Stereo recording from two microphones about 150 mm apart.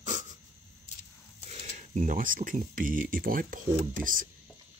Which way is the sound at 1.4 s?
45° right (ahead or behind).